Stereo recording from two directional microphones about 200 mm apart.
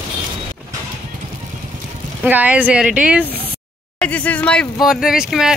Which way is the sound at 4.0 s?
5° left (ahead or behind).